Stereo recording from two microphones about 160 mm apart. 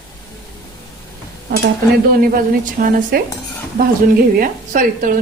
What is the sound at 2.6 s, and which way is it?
Speech, 60° right (ahead or behind).